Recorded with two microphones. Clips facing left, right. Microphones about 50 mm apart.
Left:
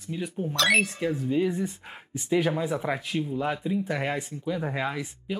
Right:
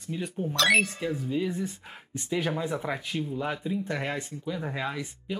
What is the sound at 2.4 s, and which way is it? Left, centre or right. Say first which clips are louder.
Speech: left 3 dB; centre.